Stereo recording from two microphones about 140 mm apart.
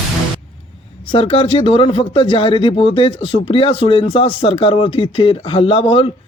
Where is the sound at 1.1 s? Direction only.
40° left (ahead or behind).